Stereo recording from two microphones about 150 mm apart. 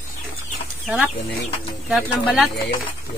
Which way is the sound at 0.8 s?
5° right (ahead or behind).